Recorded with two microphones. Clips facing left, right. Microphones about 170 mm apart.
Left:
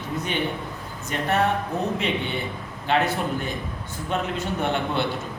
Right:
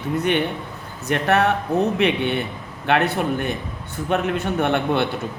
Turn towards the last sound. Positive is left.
turn(degrees=-60)  # may be behind; listen again after turning